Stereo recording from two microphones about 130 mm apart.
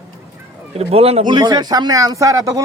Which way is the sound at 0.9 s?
50° right (ahead or behind).